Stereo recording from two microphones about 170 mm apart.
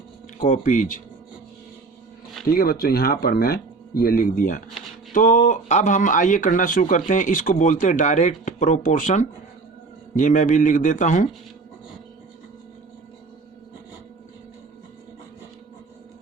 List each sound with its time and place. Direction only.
0.3 s speech: 50° left (ahead or behind)
2.5 s speech: 60° left (ahead or behind)